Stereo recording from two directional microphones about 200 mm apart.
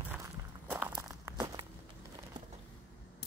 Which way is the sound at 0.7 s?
10° right (ahead or behind).